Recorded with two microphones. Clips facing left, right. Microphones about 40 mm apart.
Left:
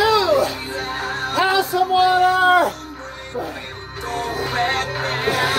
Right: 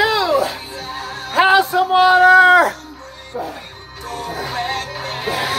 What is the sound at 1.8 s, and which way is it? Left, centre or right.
Female singing, right.